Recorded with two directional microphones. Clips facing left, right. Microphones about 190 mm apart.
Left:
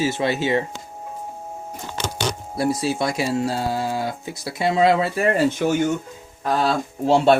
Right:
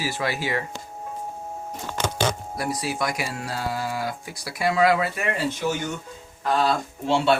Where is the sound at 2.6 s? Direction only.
25° left (ahead or behind).